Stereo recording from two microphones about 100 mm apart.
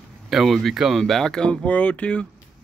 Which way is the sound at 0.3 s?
Centre (ahead or behind).